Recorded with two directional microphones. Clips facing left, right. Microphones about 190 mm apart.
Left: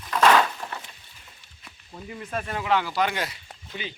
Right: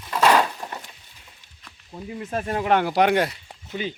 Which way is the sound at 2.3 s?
35° right (ahead or behind).